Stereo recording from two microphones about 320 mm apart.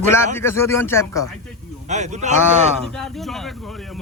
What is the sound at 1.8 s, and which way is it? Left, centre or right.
Speech, right.